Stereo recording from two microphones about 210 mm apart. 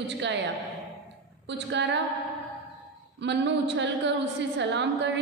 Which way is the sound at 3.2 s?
55° right (ahead or behind).